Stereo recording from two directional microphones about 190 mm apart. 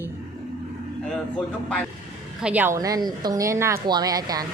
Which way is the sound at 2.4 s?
10° right (ahead or behind).